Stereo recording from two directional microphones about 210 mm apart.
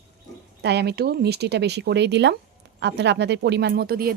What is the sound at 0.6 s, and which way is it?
Speech, 55° right (ahead or behind).